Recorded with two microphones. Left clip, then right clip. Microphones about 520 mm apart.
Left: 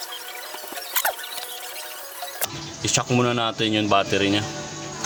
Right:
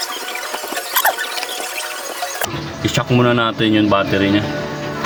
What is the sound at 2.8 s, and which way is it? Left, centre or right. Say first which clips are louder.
Speech: right 6 dB; left.